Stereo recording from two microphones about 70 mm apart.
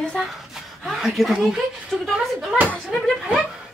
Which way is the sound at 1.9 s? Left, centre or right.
Centre.